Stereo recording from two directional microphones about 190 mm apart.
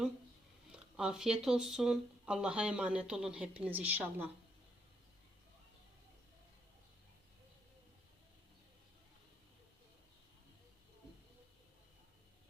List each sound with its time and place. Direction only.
0.7 s speech: 5° right (ahead or behind)